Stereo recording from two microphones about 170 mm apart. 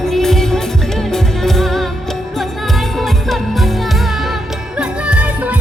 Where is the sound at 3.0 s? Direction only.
Centre (ahead or behind).